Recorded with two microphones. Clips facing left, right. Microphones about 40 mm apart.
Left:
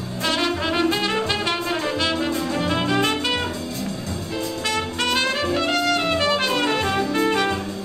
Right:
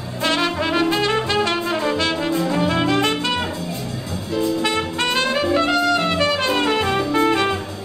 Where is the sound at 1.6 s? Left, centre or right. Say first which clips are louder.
Right 3 dB; centre.